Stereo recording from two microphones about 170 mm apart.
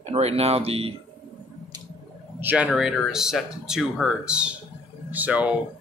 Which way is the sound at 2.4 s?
10° right (ahead or behind).